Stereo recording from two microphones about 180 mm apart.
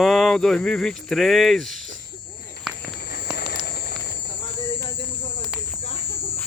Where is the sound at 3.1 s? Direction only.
60° left (ahead or behind).